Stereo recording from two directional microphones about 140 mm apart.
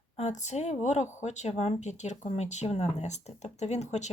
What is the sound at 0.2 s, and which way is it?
Speech, 55° left (ahead or behind).